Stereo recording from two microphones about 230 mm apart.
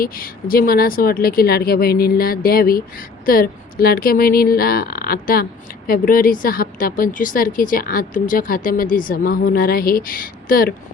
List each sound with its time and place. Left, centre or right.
0.0 s a woman's voice: left